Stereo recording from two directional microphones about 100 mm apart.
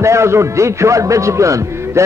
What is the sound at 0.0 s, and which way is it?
A man's voice, 30° right (ahead or behind).